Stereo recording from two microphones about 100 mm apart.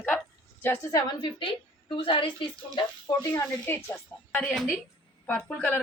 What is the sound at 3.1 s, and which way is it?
Speech, 45° left (ahead or behind).